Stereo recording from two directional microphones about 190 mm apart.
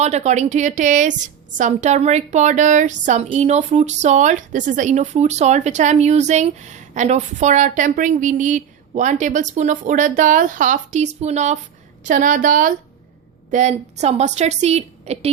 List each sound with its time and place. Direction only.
0.0 s a woman's voice: 35° right (ahead or behind)